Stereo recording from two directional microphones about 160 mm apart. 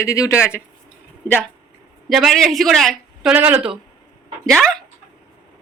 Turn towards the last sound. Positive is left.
turn(degrees=5)  # may be behind; listen again after turning